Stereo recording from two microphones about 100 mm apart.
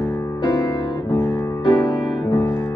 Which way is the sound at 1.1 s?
25° left (ahead or behind).